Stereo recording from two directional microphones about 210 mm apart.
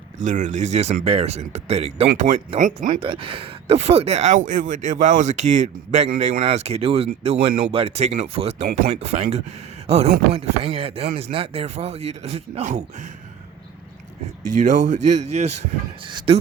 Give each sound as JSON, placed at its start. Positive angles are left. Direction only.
{"t": 0.3, "sound": "speech", "side_deg": -35}
{"t": 2.9, "sound": "speech", "side_deg": -25}
{"t": 14.5, "sound": "speech", "side_deg": -35}